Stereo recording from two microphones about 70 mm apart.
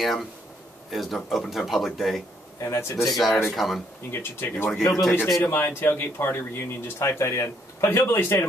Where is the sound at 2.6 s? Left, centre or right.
Left.